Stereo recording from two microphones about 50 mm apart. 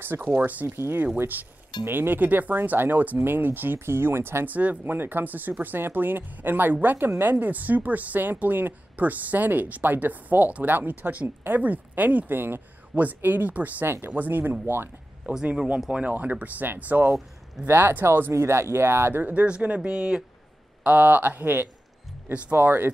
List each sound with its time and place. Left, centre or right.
0.2 s speech: right
4.5 s speech: right
4.9 s speech: right
13.8 s speech: right
14.1 s speech: right
15.3 s speech: right
18.3 s speech: right
19.4 s speech: right
20.8 s speech: right